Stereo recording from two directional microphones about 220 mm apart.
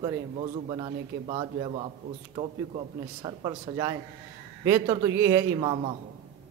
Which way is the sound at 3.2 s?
15° right (ahead or behind).